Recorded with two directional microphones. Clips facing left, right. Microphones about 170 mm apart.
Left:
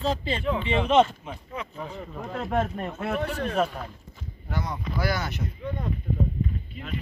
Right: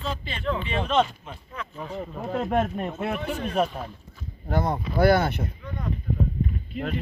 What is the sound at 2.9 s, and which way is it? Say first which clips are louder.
Speech: left 3 dB; 20° right (ahead or behind).